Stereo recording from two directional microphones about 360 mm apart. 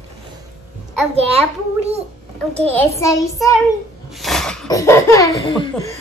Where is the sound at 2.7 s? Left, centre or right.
Centre.